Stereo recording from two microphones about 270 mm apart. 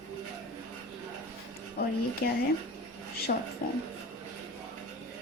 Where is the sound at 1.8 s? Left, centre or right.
Left.